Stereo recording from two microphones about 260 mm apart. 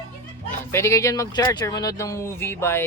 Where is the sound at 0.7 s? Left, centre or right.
Centre.